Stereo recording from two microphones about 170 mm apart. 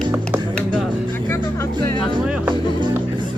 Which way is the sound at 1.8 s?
25° left (ahead or behind).